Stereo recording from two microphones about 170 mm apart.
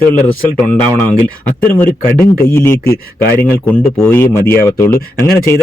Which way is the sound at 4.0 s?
15° left (ahead or behind).